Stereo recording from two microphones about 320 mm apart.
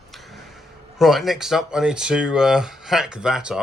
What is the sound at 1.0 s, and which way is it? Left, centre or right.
Speech, centre.